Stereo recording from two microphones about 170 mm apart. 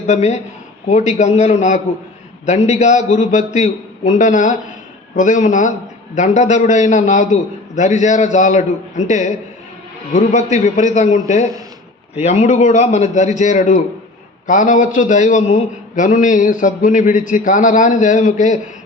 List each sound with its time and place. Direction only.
0.1 s a man's voice: 45° left (ahead or behind)